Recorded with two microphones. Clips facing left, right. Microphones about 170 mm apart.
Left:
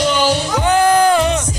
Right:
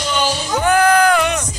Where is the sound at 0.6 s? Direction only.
20° left (ahead or behind).